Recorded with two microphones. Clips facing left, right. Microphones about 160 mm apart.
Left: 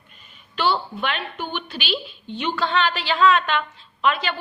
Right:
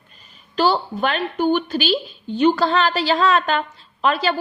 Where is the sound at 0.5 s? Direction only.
40° right (ahead or behind).